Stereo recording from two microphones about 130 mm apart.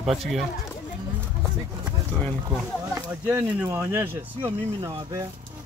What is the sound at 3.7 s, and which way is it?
Speech, 20° right (ahead or behind).